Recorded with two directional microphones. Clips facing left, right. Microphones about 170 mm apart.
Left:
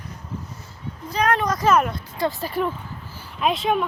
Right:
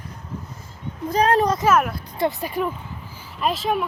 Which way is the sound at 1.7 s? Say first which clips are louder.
Left 5 dB; 5° right (ahead or behind).